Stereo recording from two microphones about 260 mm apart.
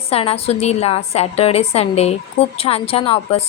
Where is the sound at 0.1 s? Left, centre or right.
Left.